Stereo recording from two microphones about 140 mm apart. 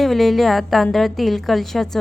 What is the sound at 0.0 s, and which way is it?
A woman's voice, centre (ahead or behind).